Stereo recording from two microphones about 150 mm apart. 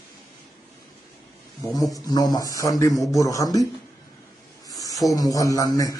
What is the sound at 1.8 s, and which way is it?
Speech, 25° left (ahead or behind).